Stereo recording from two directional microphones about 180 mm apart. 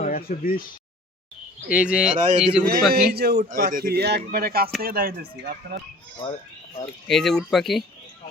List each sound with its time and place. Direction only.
0.0 s speech: 55° left (ahead or behind)
1.6 s speech: 5° right (ahead or behind)
2.9 s a man's voice: 60° right (ahead or behind)
7.1 s speech: centre (ahead or behind)